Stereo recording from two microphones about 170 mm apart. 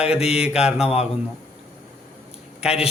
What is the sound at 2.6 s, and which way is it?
Speech, 5° right (ahead or behind).